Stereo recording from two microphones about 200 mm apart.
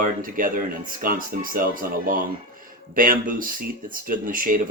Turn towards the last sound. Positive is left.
turn(degrees=-45)  # may be behind; listen again after turning